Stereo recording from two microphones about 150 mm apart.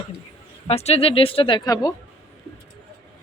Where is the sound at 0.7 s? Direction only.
45° left (ahead or behind); by 1.9 s 25° left (ahead or behind).